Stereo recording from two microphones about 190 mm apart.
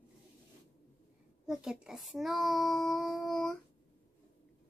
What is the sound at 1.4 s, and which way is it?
Speech, 5° right (ahead or behind).